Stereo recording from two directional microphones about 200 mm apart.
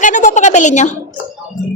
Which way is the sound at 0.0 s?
40° left (ahead or behind).